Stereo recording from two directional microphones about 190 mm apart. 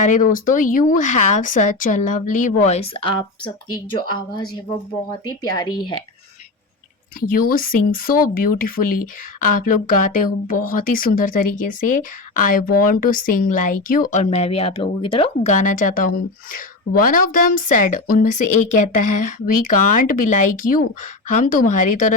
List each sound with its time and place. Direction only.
0.0 s speech: 45° left (ahead or behind); by 3.5 s 25° left (ahead or behind)
5.4 s speech: 20° left (ahead or behind)
7.2 s speech: 50° left (ahead or behind); by 15.3 s 30° left (ahead or behind)
15.4 s speech: 40° left (ahead or behind)